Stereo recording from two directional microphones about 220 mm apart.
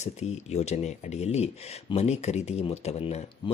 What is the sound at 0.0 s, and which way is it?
Speech, 30° left (ahead or behind).